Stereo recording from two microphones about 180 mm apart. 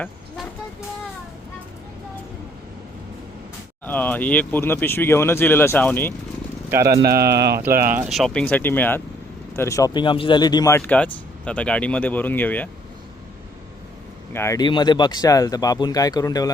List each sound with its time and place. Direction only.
3.8 s speech: 10° left (ahead or behind)
7.0 s speech: 60° right (ahead or behind)
7.7 s speech: 55° right (ahead or behind)
7.9 s speech: centre (ahead or behind)
14.3 s speech: 15° left (ahead or behind)